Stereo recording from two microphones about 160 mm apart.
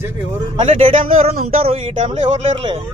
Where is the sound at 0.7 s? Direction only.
35° right (ahead or behind).